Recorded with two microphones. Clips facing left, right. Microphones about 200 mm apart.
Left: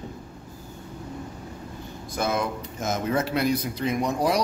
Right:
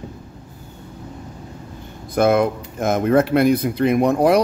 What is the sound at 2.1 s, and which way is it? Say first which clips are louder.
Speech: right 10 dB; 60° right (ahead or behind).